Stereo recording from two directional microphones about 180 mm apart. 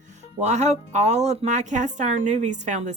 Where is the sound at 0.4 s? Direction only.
40° right (ahead or behind).